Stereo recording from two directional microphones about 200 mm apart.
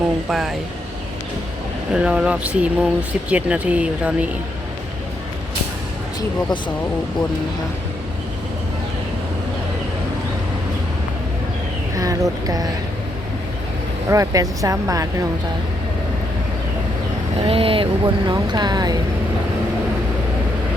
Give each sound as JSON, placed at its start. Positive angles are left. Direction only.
{"t": 0.3, "sound": "speech", "side_deg": 0}
{"t": 1.9, "sound": "speech", "side_deg": -5}
{"t": 11.9, "sound": "speech", "side_deg": -15}
{"t": 14.1, "sound": "speech", "side_deg": -15}
{"t": 17.4, "sound": "speech", "side_deg": -25}